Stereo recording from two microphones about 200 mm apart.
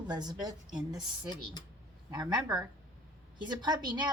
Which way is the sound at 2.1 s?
20° right (ahead or behind).